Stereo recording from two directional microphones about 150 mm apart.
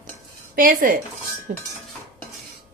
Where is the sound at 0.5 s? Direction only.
65° right (ahead or behind).